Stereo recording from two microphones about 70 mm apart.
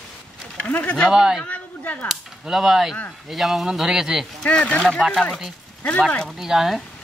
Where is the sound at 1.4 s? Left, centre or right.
Left.